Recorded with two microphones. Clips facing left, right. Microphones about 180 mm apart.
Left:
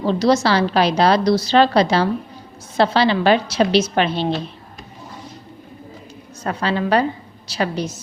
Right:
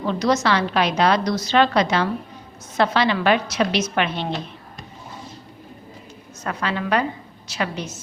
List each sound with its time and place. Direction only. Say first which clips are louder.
0.0 s a woman's voice: left 4 dB; 30° left (ahead or behind)
6.4 s a woman's voice: left 4 dB; 30° left (ahead or behind)